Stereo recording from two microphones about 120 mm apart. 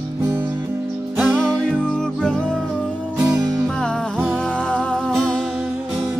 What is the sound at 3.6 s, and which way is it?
Music, 5° left (ahead or behind).